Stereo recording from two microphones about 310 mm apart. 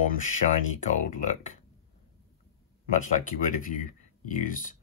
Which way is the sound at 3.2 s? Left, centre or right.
Left.